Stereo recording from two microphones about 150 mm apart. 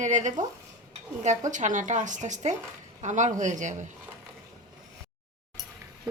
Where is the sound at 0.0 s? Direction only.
55° right (ahead or behind).